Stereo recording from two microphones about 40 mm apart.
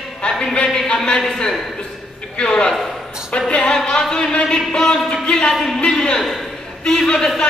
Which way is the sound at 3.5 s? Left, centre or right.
Left.